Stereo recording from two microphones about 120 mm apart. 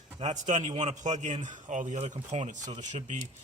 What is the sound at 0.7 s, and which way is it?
Speech, 75° right (ahead or behind).